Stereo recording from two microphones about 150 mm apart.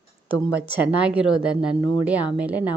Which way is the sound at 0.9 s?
5° right (ahead or behind).